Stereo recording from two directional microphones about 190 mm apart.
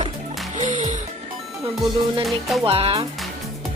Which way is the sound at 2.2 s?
Centre (ahead or behind).